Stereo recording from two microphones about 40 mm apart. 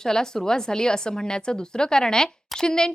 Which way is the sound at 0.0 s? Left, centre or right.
Centre.